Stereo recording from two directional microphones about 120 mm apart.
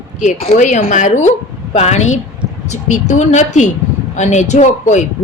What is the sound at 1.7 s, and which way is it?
Speech, 70° left (ahead or behind).